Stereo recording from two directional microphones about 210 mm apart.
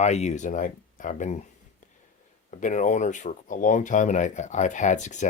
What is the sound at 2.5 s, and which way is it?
Speech, 35° left (ahead or behind).